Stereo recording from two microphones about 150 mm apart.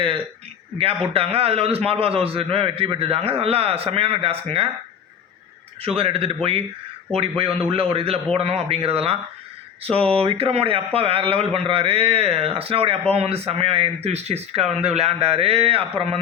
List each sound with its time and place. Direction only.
0.8 s a man's voice: 40° right (ahead or behind)
5.8 s a man's voice: 40° right (ahead or behind)